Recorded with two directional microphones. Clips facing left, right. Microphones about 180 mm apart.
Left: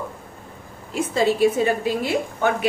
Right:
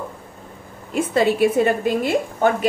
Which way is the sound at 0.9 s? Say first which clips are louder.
Right 2 dB; 60° right (ahead or behind).